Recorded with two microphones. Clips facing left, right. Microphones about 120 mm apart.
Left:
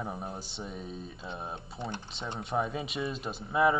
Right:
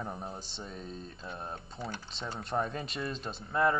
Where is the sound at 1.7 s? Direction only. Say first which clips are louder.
Left 3 dB; 25° left (ahead or behind).